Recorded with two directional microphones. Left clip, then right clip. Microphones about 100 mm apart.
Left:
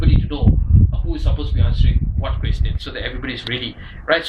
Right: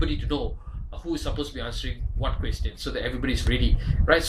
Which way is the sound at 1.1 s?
30° right (ahead or behind).